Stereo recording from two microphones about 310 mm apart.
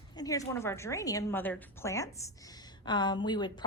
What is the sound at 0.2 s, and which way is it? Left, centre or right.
A woman's voice, centre.